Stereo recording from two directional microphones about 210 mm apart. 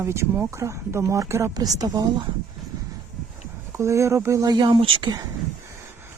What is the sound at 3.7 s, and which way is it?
Speech, 15° right (ahead or behind).